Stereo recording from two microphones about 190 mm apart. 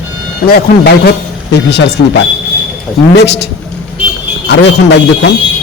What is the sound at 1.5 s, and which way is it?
A man's voice, 65° left (ahead or behind).